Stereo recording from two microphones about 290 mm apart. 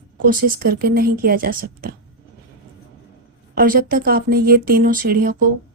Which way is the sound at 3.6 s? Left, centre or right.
Right.